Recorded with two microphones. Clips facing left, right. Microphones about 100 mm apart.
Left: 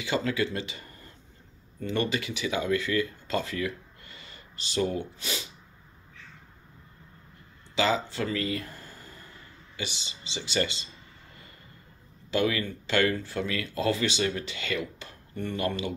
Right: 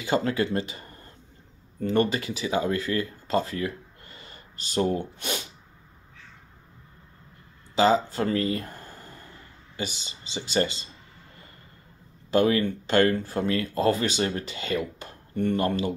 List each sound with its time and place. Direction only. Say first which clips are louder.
0.0 s speech: right 3 dB; 40° right (ahead or behind)
7.7 s speech: right 5 dB; 40° right (ahead or behind)
12.3 s speech: right 5 dB; 40° right (ahead or behind)